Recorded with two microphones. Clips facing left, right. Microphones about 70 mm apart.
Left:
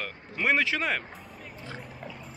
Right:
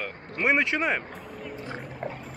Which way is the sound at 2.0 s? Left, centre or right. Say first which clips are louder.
Right 7 dB; right.